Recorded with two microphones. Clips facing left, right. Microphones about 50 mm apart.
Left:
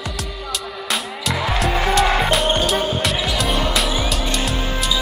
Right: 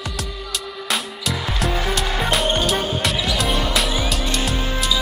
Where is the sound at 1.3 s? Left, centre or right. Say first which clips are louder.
Left 4 dB; left.